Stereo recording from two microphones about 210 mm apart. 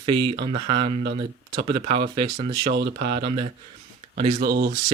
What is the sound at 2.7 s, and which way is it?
Speech, 55° right (ahead or behind).